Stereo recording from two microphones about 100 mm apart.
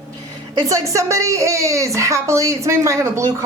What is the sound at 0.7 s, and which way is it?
A woman's voice, 30° right (ahead or behind).